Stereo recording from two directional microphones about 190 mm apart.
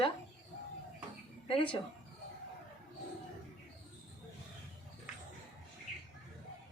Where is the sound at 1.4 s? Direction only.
25° left (ahead or behind).